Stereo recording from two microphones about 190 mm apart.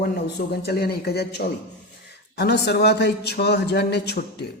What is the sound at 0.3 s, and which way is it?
A man's voice, 55° left (ahead or behind).